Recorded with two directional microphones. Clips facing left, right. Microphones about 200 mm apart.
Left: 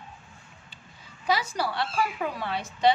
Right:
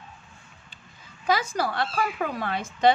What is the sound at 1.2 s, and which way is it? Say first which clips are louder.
A woman's voice: right 2 dB; 50° right (ahead or behind).